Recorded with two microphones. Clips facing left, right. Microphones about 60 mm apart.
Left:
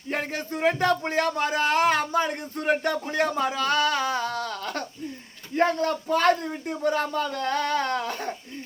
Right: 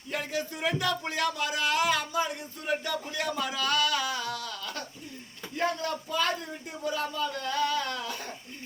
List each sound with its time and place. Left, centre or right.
0.1 s speech: left